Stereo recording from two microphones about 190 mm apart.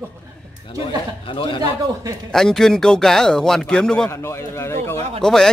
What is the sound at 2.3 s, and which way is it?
Speech, centre (ahead or behind).